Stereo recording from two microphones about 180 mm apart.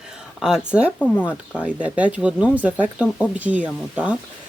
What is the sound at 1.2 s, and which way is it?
Speech, 10° right (ahead or behind).